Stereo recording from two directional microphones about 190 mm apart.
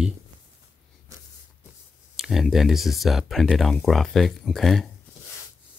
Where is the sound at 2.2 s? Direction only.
Centre (ahead or behind).